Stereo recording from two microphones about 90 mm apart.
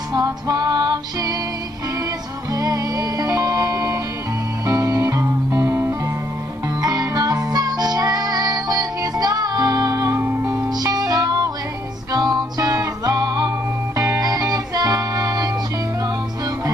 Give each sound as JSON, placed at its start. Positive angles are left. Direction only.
{"t": 0.1, "sound": "music", "side_deg": -45}
{"t": 2.5, "sound": "music", "side_deg": -45}
{"t": 6.8, "sound": "music", "side_deg": -45}
{"t": 10.8, "sound": "music", "side_deg": -45}